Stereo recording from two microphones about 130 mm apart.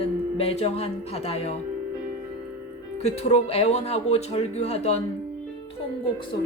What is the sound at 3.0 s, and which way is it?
Speech, 55° left (ahead or behind).